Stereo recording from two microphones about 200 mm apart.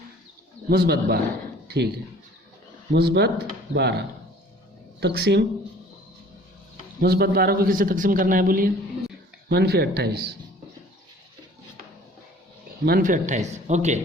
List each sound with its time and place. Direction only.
0.7 s a man's voice: 50° right (ahead or behind)
1.6 s a sound: 55° right (ahead or behind)
2.9 s speech: 55° right (ahead or behind)
7.0 s a man's voice: 50° right (ahead or behind)
12.8 s speech: 45° right (ahead or behind)